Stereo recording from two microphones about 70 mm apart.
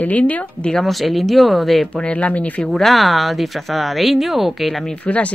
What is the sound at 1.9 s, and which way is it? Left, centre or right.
Speech, centre.